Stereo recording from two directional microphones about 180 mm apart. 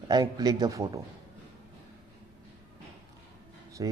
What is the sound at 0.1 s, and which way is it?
Speech, 20° right (ahead or behind).